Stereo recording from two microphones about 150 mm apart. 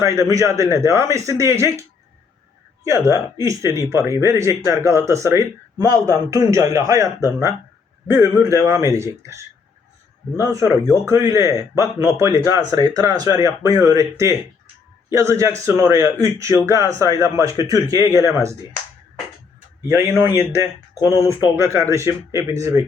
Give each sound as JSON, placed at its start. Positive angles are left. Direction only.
{"t": 0.0, "sound": "speech", "side_deg": -20}
{"t": 2.8, "sound": "speech", "side_deg": -20}
{"t": 19.9, "sound": "speech", "side_deg": -15}